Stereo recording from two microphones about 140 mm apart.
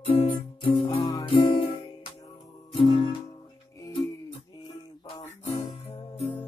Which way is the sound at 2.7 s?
35° left (ahead or behind).